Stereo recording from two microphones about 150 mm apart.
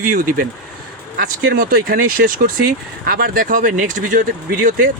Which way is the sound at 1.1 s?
85° right.